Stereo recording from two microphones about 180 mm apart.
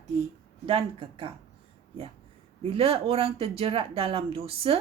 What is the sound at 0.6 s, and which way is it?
Speech, 30° right (ahead or behind).